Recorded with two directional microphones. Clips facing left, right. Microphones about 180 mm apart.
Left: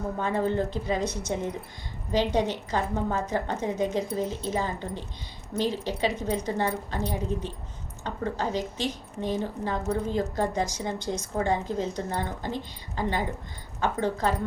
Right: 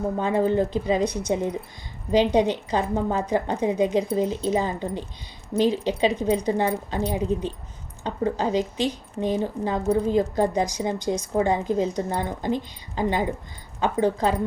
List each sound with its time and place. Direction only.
0.2 s a woman's voice: 15° right (ahead or behind)